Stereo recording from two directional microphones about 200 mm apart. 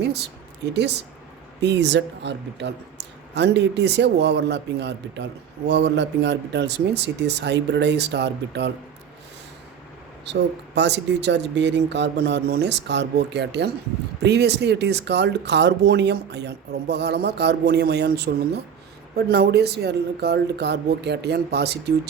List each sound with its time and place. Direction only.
0.0 s speech: 55° right (ahead or behind)
10.8 s speech: 60° right (ahead or behind)